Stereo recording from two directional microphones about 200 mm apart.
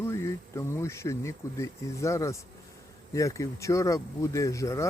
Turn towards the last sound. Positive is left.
turn(degrees=15)  # may be behind; listen again after turning